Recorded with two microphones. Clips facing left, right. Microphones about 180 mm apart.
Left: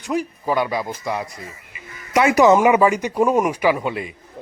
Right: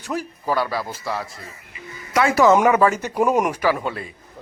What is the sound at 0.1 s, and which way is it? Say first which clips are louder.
A man's voice: left 3 dB; 15° left (ahead or behind).